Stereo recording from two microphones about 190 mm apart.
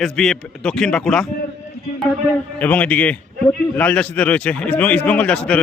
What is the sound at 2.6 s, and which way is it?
A man's voice, 10° left (ahead or behind).